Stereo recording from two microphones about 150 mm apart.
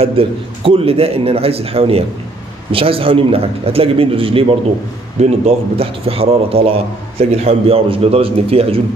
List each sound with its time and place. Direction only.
0.0 s a man's voice: 35° right (ahead or behind)
5.2 s a man's voice: 50° right (ahead or behind)